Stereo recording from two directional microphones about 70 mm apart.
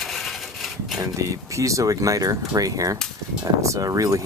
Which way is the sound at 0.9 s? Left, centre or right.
Right.